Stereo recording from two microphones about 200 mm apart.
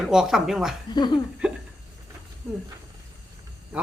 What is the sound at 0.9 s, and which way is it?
Speech, 20° left (ahead or behind).